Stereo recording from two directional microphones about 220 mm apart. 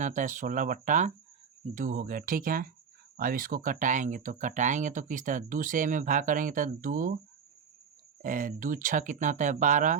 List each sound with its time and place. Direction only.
0.0 s speech: 35° right (ahead or behind)
8.2 s speech: 35° right (ahead or behind)